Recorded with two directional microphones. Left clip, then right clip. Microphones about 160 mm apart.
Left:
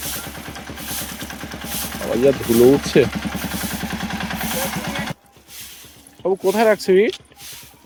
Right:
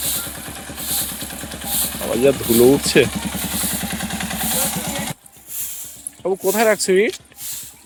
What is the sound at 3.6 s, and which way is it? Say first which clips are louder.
Vehicle: right 1 dB; 40° right (ahead or behind).